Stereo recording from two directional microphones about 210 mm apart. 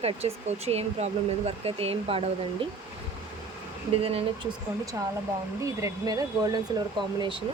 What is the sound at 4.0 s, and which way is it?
Speech, 25° right (ahead or behind).